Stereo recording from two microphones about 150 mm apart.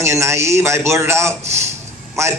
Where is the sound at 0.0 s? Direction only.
20° right (ahead or behind).